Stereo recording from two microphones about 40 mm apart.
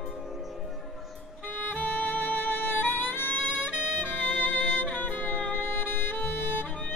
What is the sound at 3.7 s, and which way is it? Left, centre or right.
Saxophone, right.